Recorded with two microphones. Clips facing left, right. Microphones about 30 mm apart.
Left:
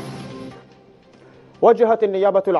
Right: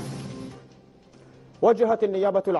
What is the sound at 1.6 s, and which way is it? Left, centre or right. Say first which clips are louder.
A man's voice: left 6 dB; left.